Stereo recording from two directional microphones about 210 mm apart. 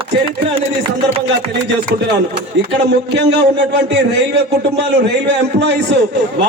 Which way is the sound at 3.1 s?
55° right (ahead or behind).